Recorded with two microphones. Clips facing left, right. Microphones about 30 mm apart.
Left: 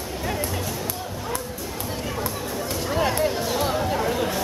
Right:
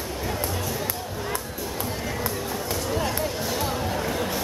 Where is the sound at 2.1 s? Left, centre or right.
Centre.